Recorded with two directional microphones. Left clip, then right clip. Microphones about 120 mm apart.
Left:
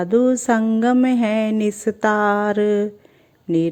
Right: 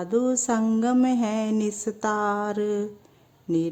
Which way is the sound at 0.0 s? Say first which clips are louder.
Left 7 dB; 15° left (ahead or behind).